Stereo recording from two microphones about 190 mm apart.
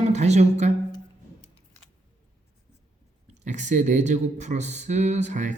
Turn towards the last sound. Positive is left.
turn(degrees=-40)  # may be behind; listen again after turning